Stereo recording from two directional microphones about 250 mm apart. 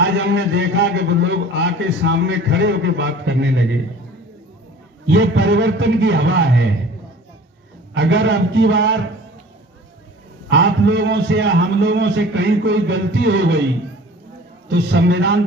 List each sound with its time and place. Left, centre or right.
0.0 s a man's voice: right
5.0 s a man's voice: right
7.9 s a man's voice: right
10.5 s a man's voice: right
14.7 s a man's voice: right